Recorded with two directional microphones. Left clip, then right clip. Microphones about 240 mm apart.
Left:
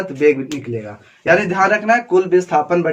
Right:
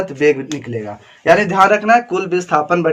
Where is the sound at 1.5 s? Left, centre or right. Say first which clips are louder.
Right 3 dB; right.